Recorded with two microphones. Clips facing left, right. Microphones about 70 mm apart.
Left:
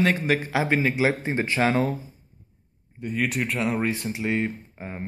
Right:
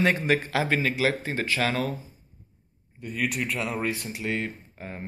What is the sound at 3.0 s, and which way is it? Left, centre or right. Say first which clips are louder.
Speech: left 3 dB; centre.